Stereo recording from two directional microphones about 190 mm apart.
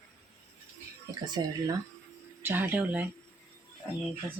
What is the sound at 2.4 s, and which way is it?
Speech, 10° right (ahead or behind).